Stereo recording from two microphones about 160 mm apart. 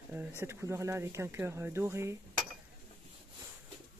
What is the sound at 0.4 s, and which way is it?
Speech, 15° right (ahead or behind).